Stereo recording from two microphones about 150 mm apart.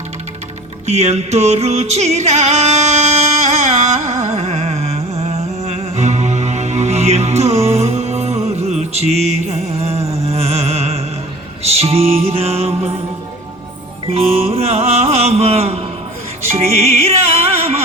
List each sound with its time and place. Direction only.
0.9 s music: 45° right (ahead or behind)
14.1 s music: 40° right (ahead or behind)